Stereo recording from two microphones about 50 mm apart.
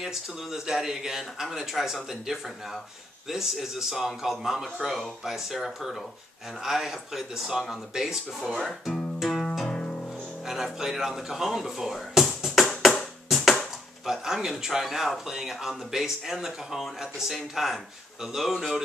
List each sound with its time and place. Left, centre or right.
0.0 s a man's voice: centre
8.6 s guitar: centre
9.7 s music: centre
10.4 s speech: centre
12.4 s music: centre
14.0 s a man's voice: centre